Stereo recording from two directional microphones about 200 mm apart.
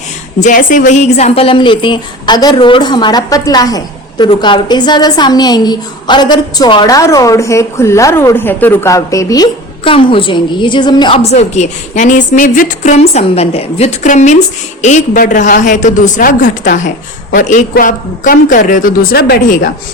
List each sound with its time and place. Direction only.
0.3 s a woman's voice: 40° left (ahead or behind)